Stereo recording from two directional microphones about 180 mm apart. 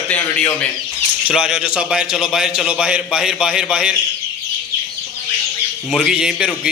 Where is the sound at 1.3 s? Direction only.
5° right (ahead or behind).